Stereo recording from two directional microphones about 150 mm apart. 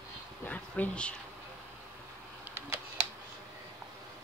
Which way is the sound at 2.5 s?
15° right (ahead or behind).